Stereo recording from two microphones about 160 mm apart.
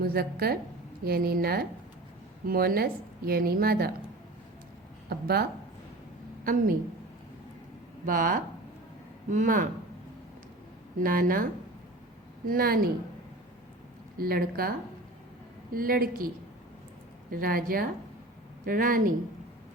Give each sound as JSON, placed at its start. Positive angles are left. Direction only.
{"t": 0.0, "sound": "a woman's voice", "side_deg": -75}
{"t": 5.0, "sound": "a woman's voice", "side_deg": -75}
{"t": 6.4, "sound": "a woman's voice", "side_deg": -60}
{"t": 8.0, "sound": "a woman's voice", "side_deg": -60}
{"t": 11.0, "sound": "a woman's voice", "side_deg": -60}
{"t": 12.5, "sound": "a woman's voice", "side_deg": -65}
{"t": 14.2, "sound": "a woman's voice", "side_deg": -70}
{"t": 17.3, "sound": "a woman's voice", "side_deg": -65}